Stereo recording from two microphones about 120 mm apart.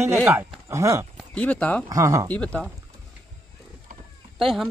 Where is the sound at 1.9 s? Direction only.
25° right (ahead or behind).